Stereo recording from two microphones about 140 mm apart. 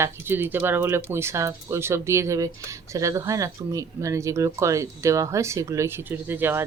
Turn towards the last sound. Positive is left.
turn(degrees=-15)  # may be behind; listen again after turning